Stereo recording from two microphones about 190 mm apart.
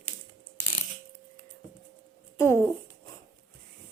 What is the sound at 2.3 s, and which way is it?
Speech, 15° left (ahead or behind).